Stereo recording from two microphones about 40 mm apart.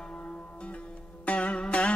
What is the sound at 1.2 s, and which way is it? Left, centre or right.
Music, left.